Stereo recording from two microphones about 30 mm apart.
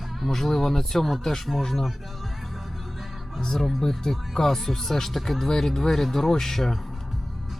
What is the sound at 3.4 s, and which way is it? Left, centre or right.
Speech, centre.